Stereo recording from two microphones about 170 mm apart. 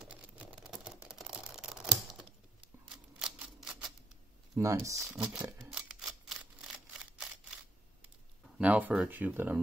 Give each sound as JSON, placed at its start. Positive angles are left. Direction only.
{"t": 0.0, "sound": "camera", "side_deg": -5}
{"t": 3.2, "sound": "a sound", "side_deg": -5}
{"t": 4.6, "sound": "speech", "side_deg": -20}
{"t": 5.1, "sound": "speech", "side_deg": -5}
{"t": 5.7, "sound": "camera", "side_deg": -5}
{"t": 8.5, "sound": "speech", "side_deg": -10}